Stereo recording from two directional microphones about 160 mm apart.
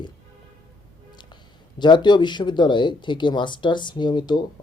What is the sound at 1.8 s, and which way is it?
Speech, 30° left (ahead or behind).